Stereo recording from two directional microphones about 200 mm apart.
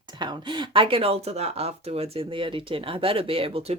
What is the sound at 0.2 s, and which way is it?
Speech, 20° right (ahead or behind).